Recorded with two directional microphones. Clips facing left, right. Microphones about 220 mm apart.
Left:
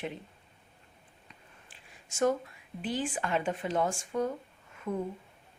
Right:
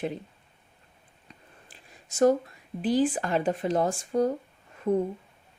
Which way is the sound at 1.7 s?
35° right (ahead or behind).